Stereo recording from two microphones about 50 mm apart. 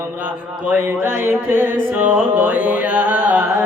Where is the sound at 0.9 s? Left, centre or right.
Right.